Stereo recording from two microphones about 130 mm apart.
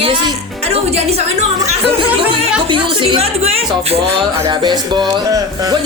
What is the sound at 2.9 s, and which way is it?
Speech, 40° right (ahead or behind).